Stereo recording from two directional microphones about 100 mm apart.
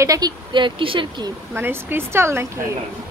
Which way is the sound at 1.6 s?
20° right (ahead or behind).